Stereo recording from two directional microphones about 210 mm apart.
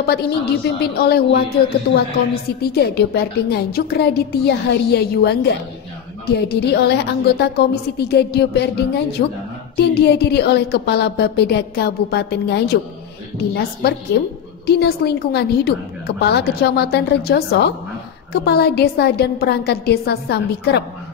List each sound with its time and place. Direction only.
0.0 s a woman's voice: 50° left (ahead or behind)